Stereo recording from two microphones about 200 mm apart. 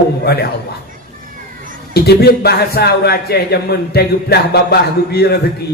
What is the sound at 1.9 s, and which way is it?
A man's voice, 50° left (ahead or behind).